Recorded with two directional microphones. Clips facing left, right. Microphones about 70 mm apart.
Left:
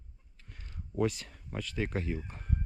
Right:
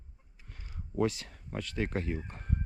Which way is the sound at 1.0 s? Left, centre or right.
Right.